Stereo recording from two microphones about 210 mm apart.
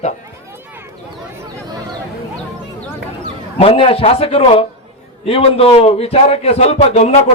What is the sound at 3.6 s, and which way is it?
A man's voice, 25° left (ahead or behind).